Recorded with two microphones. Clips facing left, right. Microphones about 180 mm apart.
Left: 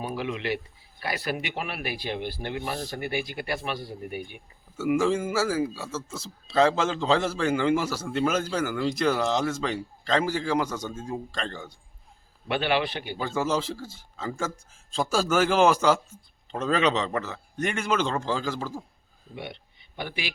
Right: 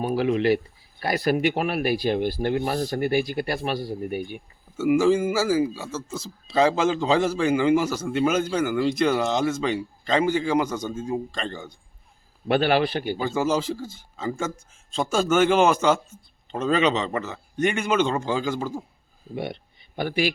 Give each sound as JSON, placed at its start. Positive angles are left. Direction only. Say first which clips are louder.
{"t": 0.1, "sound": "speech", "louder": "right 12 dB", "side_deg": -40}
{"t": 4.8, "sound": "a man's voice", "louder": "right 5 dB", "side_deg": -5}
{"t": 12.5, "sound": "speech", "louder": "right 5 dB", "side_deg": -40}
{"t": 13.1, "sound": "a man's voice", "louder": "right 1 dB", "side_deg": -5}
{"t": 20.0, "sound": "a man's voice", "louder": "right 10 dB", "side_deg": -45}